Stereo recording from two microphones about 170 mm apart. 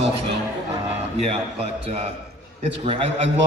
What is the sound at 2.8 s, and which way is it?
Speech, 35° right (ahead or behind).